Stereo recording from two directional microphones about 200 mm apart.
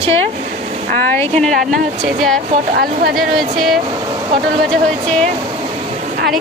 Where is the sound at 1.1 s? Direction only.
5° left (ahead or behind).